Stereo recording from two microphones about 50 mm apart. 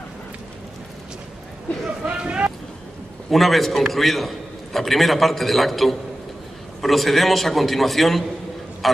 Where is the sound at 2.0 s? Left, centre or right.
Right.